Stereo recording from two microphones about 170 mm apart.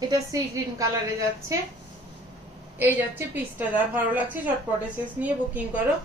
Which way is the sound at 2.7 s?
10° right (ahead or behind).